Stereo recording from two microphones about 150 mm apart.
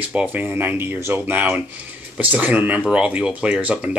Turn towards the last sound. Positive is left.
turn(degrees=-10)  # may be behind; listen again after turning